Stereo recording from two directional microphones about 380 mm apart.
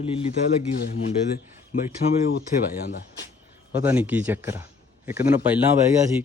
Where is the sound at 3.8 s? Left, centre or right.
Centre.